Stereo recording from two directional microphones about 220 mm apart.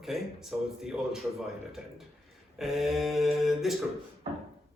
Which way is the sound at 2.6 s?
Centre (ahead or behind).